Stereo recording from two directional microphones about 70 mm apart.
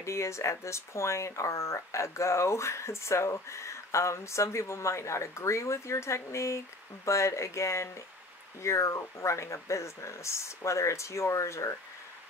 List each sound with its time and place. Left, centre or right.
0.0 s speech: left